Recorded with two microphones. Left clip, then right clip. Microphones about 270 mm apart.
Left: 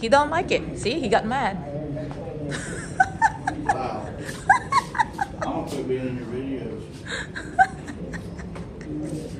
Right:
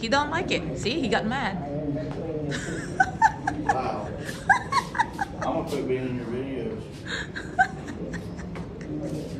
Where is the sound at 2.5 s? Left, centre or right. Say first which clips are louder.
Left 4 dB; centre.